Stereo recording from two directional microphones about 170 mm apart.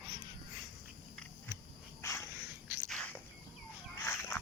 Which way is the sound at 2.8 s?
5° left (ahead or behind).